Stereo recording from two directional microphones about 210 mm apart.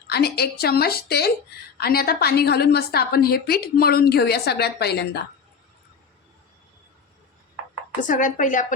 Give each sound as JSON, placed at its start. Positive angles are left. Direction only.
{"t": 0.1, "sound": "a woman's voice", "side_deg": 50}
{"t": 8.0, "sound": "a woman's voice", "side_deg": 40}